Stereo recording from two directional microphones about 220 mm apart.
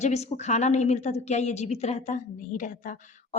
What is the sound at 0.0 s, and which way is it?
A woman's voice, 30° left (ahead or behind).